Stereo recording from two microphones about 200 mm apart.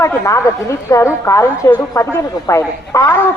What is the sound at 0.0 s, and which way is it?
A woman's voice, 15° left (ahead or behind).